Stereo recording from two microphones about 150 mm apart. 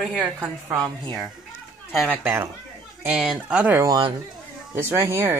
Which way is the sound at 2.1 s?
15° right (ahead or behind).